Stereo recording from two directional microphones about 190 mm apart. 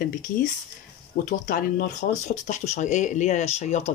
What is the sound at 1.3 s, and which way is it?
Speech, 45° left (ahead or behind).